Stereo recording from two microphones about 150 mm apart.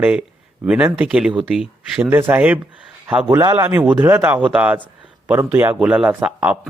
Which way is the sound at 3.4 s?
25° right (ahead or behind).